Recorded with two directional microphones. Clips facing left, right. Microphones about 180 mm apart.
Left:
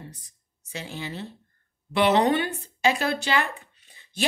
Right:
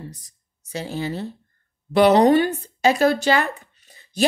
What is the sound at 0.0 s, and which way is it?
Speech, 40° right (ahead or behind).